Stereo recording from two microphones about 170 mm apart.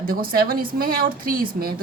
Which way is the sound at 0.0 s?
60° right (ahead or behind).